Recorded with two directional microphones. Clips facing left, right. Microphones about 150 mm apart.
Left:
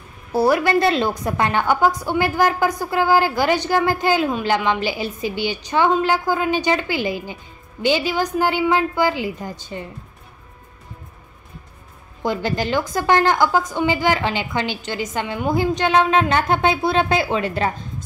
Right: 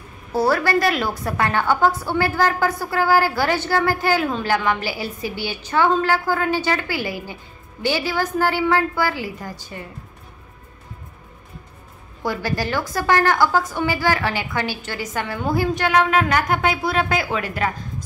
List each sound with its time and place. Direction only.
0.3 s a woman's voice: 15° left (ahead or behind)
12.2 s a woman's voice: 20° left (ahead or behind)